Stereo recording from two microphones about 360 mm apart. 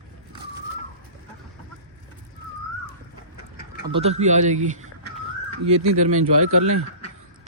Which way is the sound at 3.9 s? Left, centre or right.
Centre.